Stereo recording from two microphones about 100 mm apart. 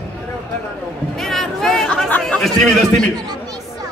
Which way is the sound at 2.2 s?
5° left (ahead or behind).